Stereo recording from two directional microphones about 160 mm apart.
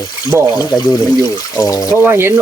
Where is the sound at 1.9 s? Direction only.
15° right (ahead or behind).